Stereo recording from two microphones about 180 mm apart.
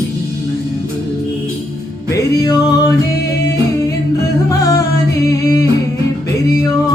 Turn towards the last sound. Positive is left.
turn(degrees=20)  # may be behind; listen again after turning